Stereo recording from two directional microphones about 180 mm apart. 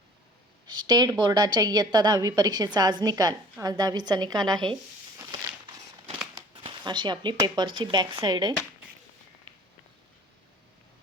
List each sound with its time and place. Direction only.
0.7 s a woman's voice: 25° right (ahead or behind)
6.6 s a woman's voice: 25° right (ahead or behind)